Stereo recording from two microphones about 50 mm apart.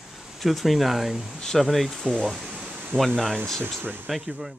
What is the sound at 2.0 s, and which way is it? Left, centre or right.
Speech, centre.